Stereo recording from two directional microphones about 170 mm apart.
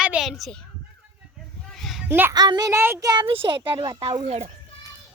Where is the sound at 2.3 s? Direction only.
25° right (ahead or behind).